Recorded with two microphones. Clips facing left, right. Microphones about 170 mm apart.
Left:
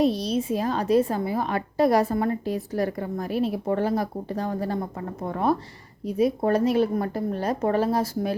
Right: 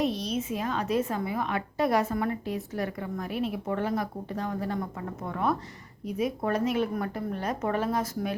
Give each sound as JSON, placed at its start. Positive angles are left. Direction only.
{"t": 0.0, "sound": "a woman's voice", "side_deg": 35}